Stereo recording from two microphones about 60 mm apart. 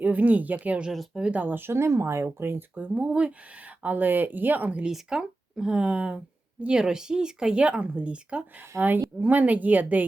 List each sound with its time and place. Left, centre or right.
0.0 s speech: right
0.9 s speech: centre
1.3 s speech: right
2.7 s speech: right
4.9 s speech: centre
8.7 s a woman's voice: right
9.2 s speech: right